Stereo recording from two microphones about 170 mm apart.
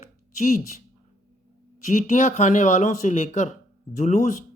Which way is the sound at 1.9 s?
45° left (ahead or behind).